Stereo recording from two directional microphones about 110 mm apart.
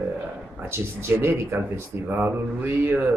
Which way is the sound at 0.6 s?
20° right (ahead or behind).